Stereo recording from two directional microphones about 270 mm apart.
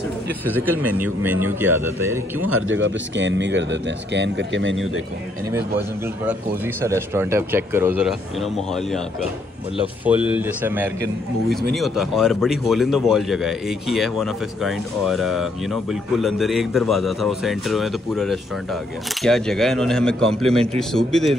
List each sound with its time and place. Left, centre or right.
0.6 s a man's voice: centre
2.5 s speech: right
5.8 s a man's voice: centre
10.3 s a man's voice: centre